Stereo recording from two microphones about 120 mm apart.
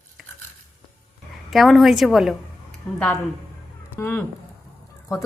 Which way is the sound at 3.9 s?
15° left (ahead or behind).